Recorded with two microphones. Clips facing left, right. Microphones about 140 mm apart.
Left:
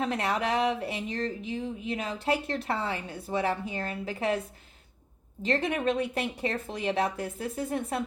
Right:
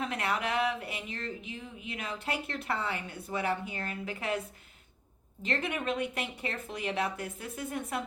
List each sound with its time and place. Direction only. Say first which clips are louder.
0.0 s speech: left 4 dB; 35° left (ahead or behind)